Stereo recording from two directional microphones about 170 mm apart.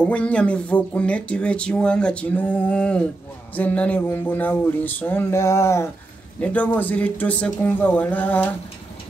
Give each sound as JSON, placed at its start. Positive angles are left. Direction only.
{"t": 0.0, "sound": "speech", "side_deg": 5}